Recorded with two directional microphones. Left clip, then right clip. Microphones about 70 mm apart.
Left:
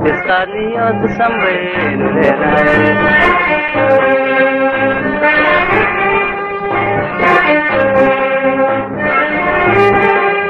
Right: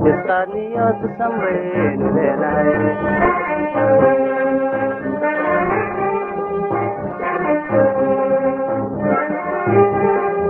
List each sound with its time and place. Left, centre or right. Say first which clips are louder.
0.8 s music: left 6 dB; left
7.2 s music: left 9 dB; left
9.7 s music: left 3 dB; left